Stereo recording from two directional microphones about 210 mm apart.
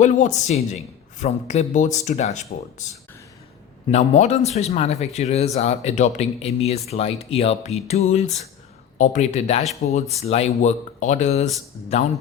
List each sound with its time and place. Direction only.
0.0 s speech: 35° left (ahead or behind)
3.9 s speech: 30° left (ahead or behind)